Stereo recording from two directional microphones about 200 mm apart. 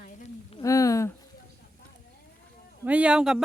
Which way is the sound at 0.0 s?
35° left (ahead or behind).